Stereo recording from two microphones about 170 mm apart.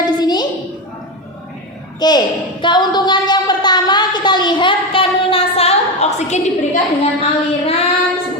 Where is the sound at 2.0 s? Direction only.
25° left (ahead or behind); by 6.5 s 40° left (ahead or behind).